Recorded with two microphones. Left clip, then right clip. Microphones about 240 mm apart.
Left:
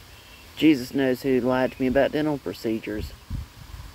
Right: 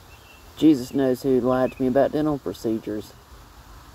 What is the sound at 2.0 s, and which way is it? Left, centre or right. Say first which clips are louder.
Speech: right 2 dB; centre.